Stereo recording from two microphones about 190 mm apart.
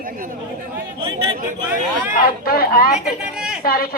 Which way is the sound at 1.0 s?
20° right (ahead or behind).